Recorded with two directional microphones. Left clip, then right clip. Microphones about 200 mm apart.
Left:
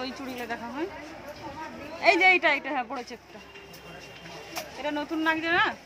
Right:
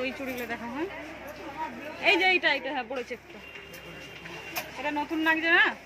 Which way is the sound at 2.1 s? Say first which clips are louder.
Left 2 dB; 20° left (ahead or behind).